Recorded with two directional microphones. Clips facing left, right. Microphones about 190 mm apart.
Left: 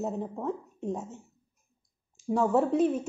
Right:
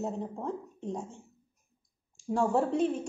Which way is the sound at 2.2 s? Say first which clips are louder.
Left 2 dB; centre (ahead or behind).